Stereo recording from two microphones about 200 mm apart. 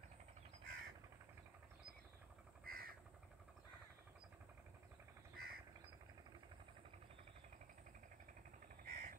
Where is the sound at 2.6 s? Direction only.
45° right (ahead or behind).